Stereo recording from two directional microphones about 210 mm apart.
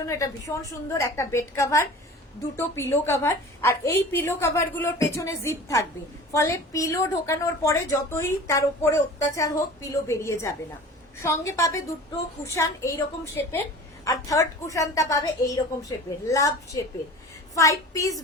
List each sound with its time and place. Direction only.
0.1 s a woman's voice: 15° left (ahead or behind)